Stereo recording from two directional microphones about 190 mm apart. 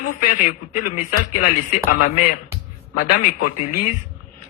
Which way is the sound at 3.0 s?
40° left (ahead or behind).